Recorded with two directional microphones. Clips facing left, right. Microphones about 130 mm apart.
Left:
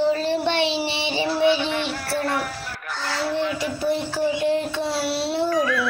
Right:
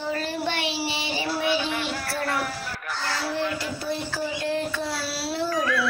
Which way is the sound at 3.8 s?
15° left (ahead or behind).